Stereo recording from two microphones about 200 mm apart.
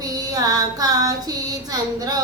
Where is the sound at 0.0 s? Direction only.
20° right (ahead or behind).